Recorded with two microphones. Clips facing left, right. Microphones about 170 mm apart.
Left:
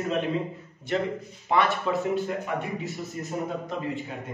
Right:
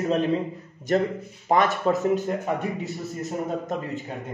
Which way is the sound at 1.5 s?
45° right (ahead or behind).